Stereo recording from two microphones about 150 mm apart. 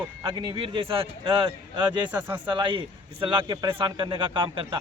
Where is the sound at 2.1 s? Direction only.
15° right (ahead or behind).